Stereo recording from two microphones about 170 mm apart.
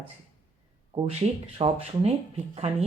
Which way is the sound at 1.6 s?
30° right (ahead or behind).